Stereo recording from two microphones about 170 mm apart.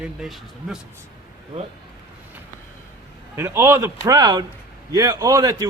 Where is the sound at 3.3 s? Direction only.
15° right (ahead or behind).